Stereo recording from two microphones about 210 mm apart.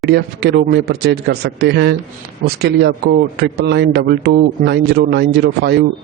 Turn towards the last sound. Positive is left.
turn(degrees=-55)  # may be behind; listen again after turning